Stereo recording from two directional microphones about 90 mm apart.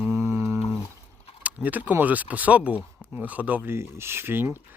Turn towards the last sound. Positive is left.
turn(degrees=-25)  # may be behind; listen again after turning